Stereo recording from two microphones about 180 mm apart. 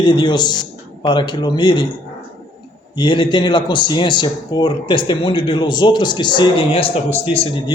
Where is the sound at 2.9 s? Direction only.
25° left (ahead or behind).